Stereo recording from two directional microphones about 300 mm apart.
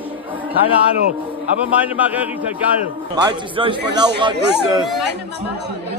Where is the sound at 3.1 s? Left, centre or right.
Centre.